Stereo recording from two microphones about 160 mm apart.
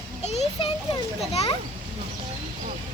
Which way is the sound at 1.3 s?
40° left (ahead or behind).